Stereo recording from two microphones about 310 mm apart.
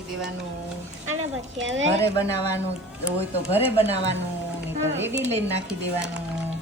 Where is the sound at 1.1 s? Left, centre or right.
Right.